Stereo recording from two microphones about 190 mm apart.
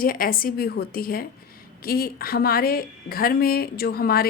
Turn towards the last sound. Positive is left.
turn(degrees=55)  # may be behind; listen again after turning